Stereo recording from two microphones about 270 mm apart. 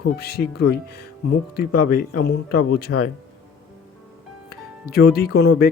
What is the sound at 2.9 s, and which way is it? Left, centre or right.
Speech, left.